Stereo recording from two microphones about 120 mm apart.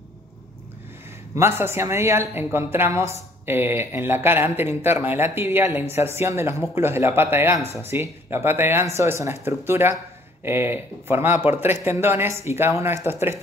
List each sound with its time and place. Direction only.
1.3 s speech: 20° right (ahead or behind)